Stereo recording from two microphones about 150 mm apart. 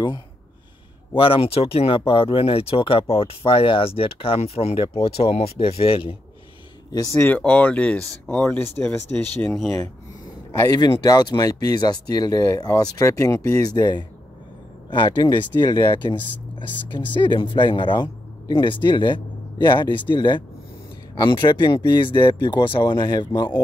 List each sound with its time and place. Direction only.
1.1 s speech: 35° left (ahead or behind)
6.9 s speech: 20° left (ahead or behind)
10.6 s speech: 25° left (ahead or behind)